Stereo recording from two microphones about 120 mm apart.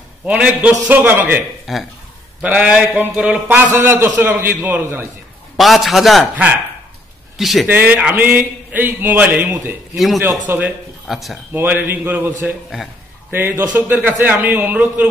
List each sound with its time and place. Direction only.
0.2 s speech: 10° right (ahead or behind)
1.7 s a man's voice: centre (ahead or behind)
5.6 s a man's voice: centre (ahead or behind)
7.3 s a man's voice: centre (ahead or behind)
7.6 s speech: 15° right (ahead or behind)
9.9 s a man's voice: centre (ahead or behind)
10.5 s speech: 20° right (ahead or behind)
11.1 s a man's voice: centre (ahead or behind)
11.5 s speech: 15° right (ahead or behind)
12.6 s a man's voice: centre (ahead or behind)
13.3 s speech: 20° right (ahead or behind)